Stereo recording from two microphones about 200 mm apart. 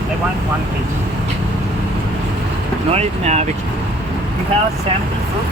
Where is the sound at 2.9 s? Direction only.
35° right (ahead or behind).